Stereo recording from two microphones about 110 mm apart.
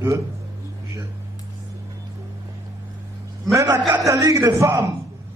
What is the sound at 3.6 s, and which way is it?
A man's voice, 30° right (ahead or behind).